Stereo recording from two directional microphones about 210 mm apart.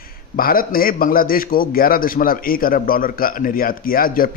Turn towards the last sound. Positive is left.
turn(degrees=45)  # may be behind; listen again after turning